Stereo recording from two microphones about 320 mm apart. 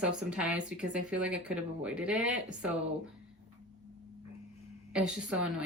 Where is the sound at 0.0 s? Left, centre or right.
Centre.